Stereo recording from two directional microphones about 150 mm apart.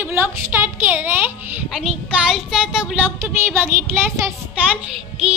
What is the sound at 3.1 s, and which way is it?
Speech, 15° right (ahead or behind).